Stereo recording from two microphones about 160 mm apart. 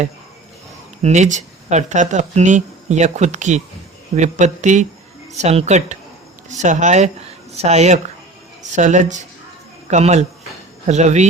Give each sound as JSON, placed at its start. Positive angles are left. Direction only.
{"t": 1.0, "sound": "speech", "side_deg": -45}